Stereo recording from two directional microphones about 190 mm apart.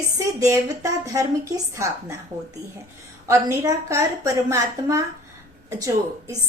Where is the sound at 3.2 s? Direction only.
15° right (ahead or behind).